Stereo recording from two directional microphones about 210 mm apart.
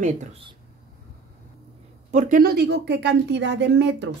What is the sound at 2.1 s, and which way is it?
A woman's voice, 40° right (ahead or behind).